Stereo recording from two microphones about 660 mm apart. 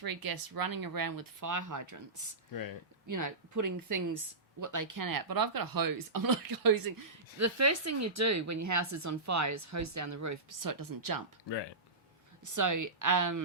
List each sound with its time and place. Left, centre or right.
0.0 s speech: right
3.1 s speech: right
11.4 s speech: left
12.5 s speech: right